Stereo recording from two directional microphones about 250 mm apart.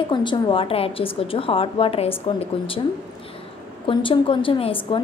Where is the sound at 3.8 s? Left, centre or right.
Centre.